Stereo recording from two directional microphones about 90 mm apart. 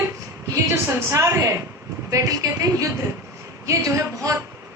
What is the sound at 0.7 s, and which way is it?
A woman's voice, 25° right (ahead or behind).